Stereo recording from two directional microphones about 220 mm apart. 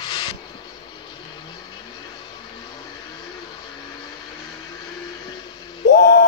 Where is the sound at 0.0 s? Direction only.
20° left (ahead or behind).